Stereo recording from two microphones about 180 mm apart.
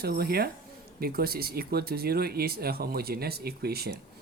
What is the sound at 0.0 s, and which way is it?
Speech, 60° right (ahead or behind).